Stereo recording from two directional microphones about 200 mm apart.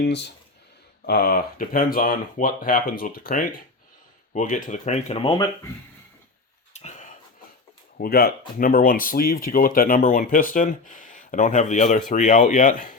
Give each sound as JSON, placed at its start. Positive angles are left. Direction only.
{"t": 0.0, "sound": "speech", "side_deg": 60}
{"t": 6.7, "sound": "a sound", "side_deg": 35}
{"t": 7.9, "sound": "speech", "side_deg": 50}